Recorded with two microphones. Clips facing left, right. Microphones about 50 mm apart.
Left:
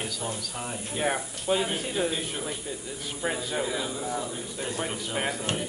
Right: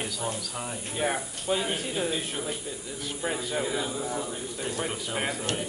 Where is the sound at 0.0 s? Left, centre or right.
Centre.